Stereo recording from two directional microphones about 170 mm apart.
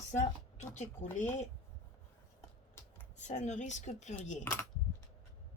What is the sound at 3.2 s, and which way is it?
A woman's voice, 45° left (ahead or behind).